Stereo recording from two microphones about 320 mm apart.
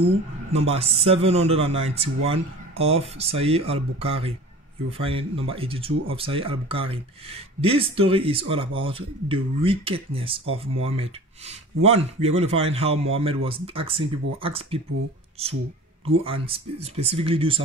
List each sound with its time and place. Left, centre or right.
0.0 s speech: centre